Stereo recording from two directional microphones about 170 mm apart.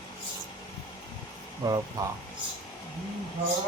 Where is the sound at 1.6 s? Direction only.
20° right (ahead or behind).